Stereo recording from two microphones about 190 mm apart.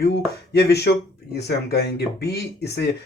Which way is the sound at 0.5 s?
60° left (ahead or behind).